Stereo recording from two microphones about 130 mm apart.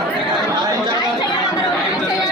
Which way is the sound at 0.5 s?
30° right (ahead or behind).